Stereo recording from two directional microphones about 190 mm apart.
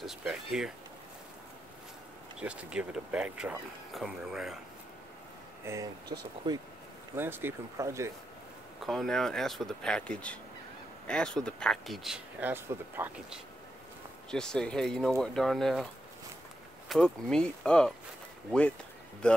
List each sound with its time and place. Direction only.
0.0 s speech: centre (ahead or behind)
2.4 s speech: 5° right (ahead or behind)
5.7 s speech: 15° right (ahead or behind)
6.1 s speech: 25° right (ahead or behind)
7.2 s speech: 10° right (ahead or behind)
8.8 s speech: centre (ahead or behind)
14.3 s speech: 5° left (ahead or behind)
16.9 s speech: 5° left (ahead or behind)
19.2 s speech: 5° left (ahead or behind)